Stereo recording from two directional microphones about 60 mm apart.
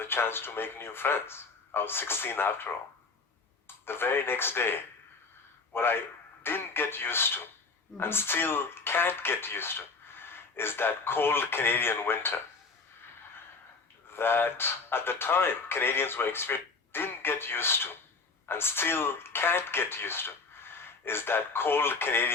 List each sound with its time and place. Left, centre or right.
0.0 s speech: left
3.8 s speech: left
14.1 s speech: left